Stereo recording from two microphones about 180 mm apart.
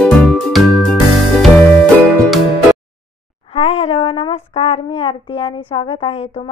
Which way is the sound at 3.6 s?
35° left (ahead or behind).